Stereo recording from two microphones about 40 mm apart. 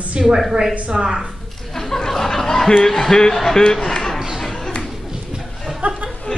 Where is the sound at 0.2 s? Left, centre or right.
Centre.